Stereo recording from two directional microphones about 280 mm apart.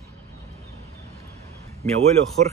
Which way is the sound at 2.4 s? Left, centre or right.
Right.